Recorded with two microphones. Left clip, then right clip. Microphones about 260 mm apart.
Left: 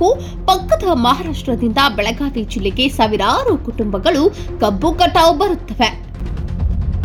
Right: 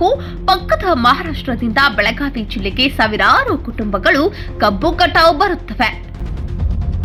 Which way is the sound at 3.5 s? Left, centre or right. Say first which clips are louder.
Left 2 dB; right.